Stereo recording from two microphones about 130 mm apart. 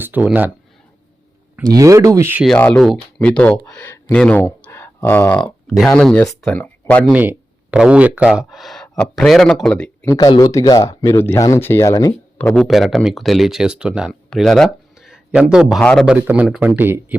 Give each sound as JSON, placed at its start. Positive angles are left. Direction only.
{"t": 0.0, "sound": "speech", "side_deg": -10}
{"t": 1.7, "sound": "speech", "side_deg": -25}
{"t": 2.6, "sound": "speech", "side_deg": 10}
{"t": 4.6, "sound": "a sound", "side_deg": 15}
{"t": 5.6, "sound": "speech", "side_deg": 0}
{"t": 7.1, "sound": "speech", "side_deg": -10}
{"t": 10.2, "sound": "speech", "side_deg": 30}
{"t": 12.4, "sound": "speech", "side_deg": 10}
{"t": 12.6, "sound": "speech", "side_deg": 0}
{"t": 15.8, "sound": "speech", "side_deg": 10}
{"t": 16.0, "sound": "speech", "side_deg": -10}